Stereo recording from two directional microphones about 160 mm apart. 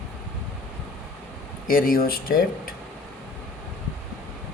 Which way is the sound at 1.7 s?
60° left (ahead or behind).